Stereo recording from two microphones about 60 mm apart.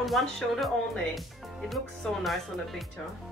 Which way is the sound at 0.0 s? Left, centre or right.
Centre.